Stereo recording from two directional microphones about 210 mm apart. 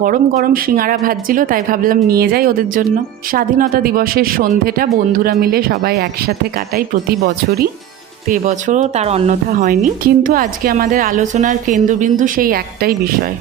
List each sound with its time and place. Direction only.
0.0 s a woman's voice: 45° right (ahead or behind)
8.3 s speech: 35° right (ahead or behind)